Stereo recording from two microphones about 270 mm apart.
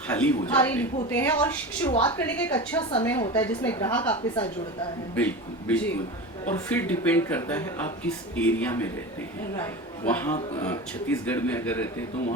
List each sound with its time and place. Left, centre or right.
0.1 s speech: centre
1.9 s speech: centre
2.1 s a woman's voice: centre